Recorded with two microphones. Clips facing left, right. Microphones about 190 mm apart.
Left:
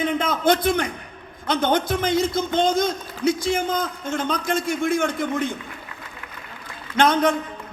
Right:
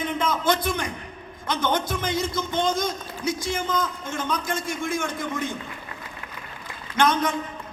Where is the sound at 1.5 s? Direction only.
60° left (ahead or behind).